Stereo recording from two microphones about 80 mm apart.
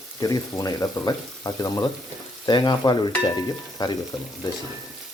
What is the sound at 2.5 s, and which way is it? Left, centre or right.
Stir, left.